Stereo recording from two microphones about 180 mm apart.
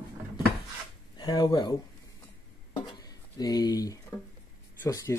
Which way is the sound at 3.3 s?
20° left (ahead or behind).